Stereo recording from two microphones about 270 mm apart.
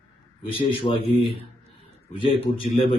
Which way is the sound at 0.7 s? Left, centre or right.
Centre.